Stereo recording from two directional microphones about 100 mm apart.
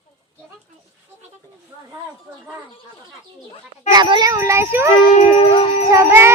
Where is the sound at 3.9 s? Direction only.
50° right (ahead or behind).